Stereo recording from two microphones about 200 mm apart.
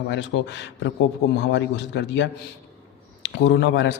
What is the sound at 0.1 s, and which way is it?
A man's voice, 65° left (ahead or behind).